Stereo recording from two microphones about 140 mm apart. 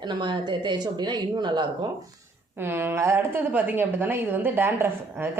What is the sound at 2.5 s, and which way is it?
A woman's voice, 15° right (ahead or behind).